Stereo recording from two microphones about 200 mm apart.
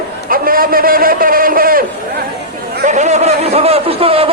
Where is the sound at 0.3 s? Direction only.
45° right (ahead or behind).